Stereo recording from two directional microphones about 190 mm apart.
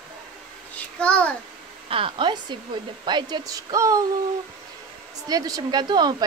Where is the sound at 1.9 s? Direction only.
25° right (ahead or behind).